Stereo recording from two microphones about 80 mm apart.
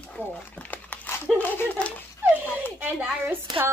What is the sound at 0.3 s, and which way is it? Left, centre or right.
Crumpling, centre.